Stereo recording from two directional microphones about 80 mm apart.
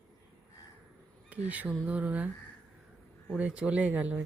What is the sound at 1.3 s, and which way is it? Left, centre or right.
Speech, centre.